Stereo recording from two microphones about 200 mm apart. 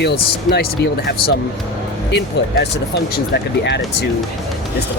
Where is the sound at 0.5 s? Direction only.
55° left (ahead or behind).